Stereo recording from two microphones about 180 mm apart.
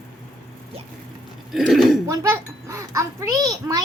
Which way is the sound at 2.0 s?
15° right (ahead or behind).